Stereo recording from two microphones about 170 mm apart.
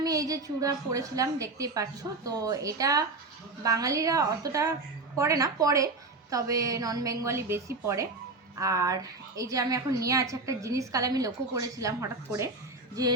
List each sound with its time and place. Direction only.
0.0 s a woman's voice: 20° right (ahead or behind)